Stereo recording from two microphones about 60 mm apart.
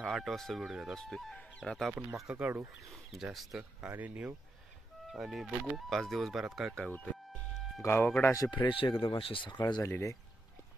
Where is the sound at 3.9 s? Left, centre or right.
Right.